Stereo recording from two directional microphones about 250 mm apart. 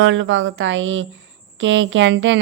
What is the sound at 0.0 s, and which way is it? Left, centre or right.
Speech, right.